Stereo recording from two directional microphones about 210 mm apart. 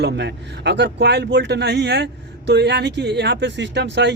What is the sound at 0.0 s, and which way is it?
Speech, 55° right (ahead or behind).